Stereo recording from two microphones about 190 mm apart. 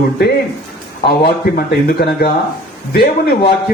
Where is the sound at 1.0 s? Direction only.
55° left (ahead or behind).